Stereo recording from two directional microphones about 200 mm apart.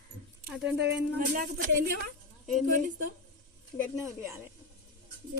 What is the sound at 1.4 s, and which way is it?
Speech, 45° right (ahead or behind).